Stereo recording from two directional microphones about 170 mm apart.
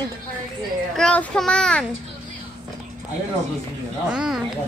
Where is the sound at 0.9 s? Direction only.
5° left (ahead or behind).